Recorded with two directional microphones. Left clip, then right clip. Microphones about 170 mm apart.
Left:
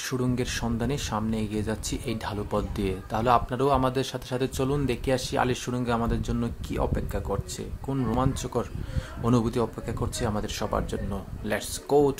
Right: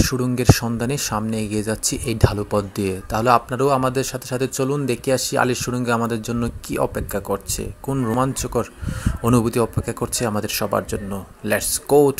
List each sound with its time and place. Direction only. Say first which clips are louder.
0.0 s speech: right 9 dB; 25° right (ahead or behind)